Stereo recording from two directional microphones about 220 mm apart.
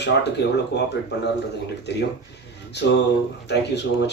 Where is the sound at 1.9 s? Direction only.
50° left (ahead or behind).